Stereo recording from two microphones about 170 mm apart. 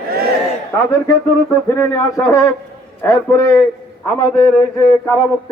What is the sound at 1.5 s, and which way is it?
Speech, 15° left (ahead or behind).